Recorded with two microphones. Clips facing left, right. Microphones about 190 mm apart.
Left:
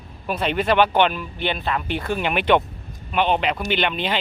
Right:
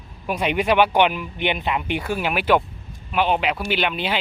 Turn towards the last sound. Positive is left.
turn(degrees=-5)  # may be behind; listen again after turning